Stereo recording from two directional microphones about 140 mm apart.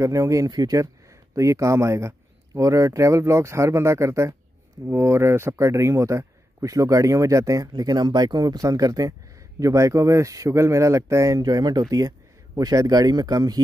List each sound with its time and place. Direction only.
0.0 s a man's voice: 20° right (ahead or behind)